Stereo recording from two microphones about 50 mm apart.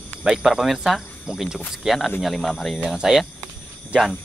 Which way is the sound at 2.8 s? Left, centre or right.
Centre.